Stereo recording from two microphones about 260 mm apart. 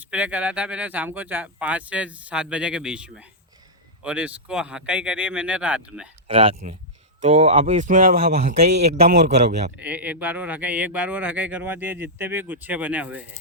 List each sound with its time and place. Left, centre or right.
0.0 s speech: centre
6.2 s speech: right
9.1 s a man's voice: right
9.7 s speech: centre